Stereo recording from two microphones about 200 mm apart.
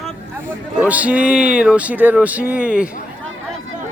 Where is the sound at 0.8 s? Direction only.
5° right (ahead or behind).